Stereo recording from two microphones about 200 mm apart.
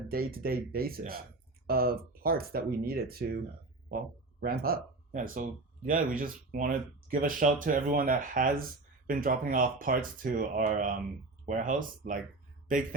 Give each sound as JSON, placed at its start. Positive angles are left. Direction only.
{"t": 0.1, "sound": "speech", "side_deg": -50}